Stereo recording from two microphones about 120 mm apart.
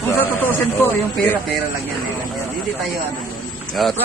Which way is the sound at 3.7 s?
Centre (ahead or behind).